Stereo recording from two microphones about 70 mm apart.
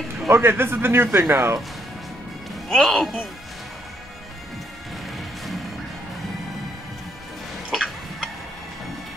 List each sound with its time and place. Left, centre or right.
0.3 s speech: right
2.7 s speech: centre
7.7 s tick-tock: centre